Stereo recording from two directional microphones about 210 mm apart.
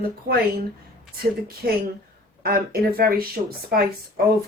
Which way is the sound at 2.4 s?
45° right (ahead or behind).